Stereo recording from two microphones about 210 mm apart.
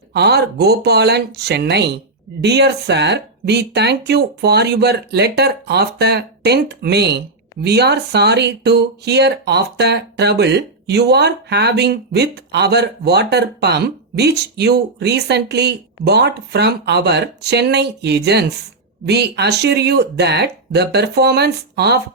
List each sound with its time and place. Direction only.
0.1 s speech: 50° right (ahead or behind)